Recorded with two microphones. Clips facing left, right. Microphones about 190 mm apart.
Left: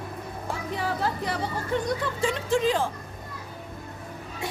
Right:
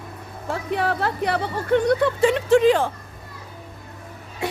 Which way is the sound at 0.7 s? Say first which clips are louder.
Right 5 dB; 65° right (ahead or behind).